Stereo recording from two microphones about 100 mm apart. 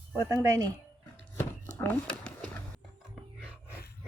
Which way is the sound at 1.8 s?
20° left (ahead or behind).